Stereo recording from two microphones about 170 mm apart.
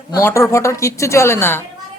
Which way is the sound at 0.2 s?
15° left (ahead or behind).